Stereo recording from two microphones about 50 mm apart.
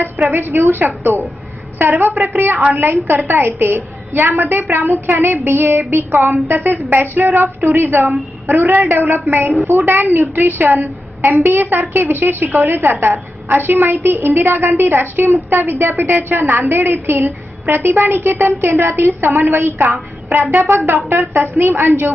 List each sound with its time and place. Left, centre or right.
0.0 s a woman's voice: right
2.0 s a woman's voice: right
7.4 s a woman's voice: right
20.5 s a woman's voice: right